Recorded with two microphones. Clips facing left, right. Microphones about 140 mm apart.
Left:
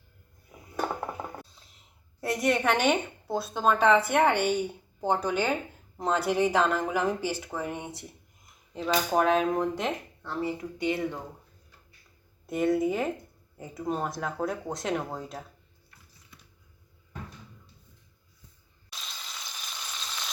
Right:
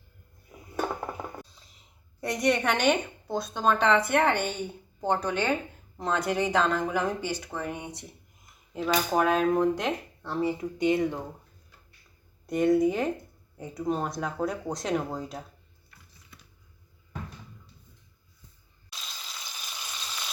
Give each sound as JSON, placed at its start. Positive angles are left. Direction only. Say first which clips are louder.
{"t": 1.5, "sound": "a woman's voice", "louder": "right 1 dB", "side_deg": 0}
{"t": 10.2, "sound": "speech", "louder": "right 3 dB", "side_deg": -20}
{"t": 12.5, "sound": "speech", "louder": "right 3 dB", "side_deg": 0}
{"t": 18.9, "sound": "a sound", "louder": "even", "side_deg": 0}